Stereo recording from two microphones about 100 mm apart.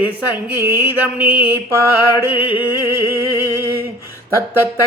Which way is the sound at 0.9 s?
15° right (ahead or behind).